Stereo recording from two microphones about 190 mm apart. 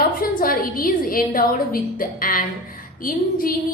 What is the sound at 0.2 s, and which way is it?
A woman's voice, 50° left (ahead or behind).